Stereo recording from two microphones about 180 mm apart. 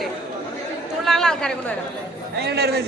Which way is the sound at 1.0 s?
5° left (ahead or behind).